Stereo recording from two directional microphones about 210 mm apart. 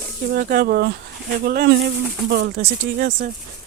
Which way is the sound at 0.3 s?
45° right (ahead or behind).